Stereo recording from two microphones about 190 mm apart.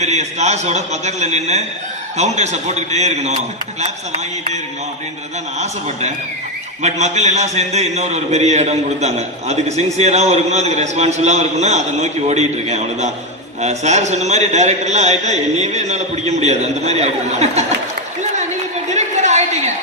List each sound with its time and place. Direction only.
0.0 s a man's voice: 35° right (ahead or behind)
6.8 s a man's voice: 35° right (ahead or behind)
18.9 s a sound: 35° right (ahead or behind)